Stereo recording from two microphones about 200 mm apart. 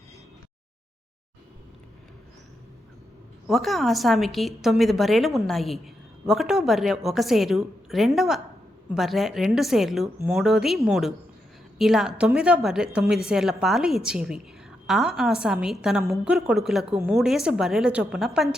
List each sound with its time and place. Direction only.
3.4 s a woman's voice: centre (ahead or behind)